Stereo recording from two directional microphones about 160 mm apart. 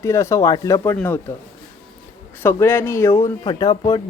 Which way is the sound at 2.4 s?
15° left (ahead or behind).